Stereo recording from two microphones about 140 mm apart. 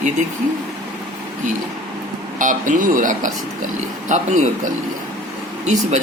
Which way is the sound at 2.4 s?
70° right (ahead or behind).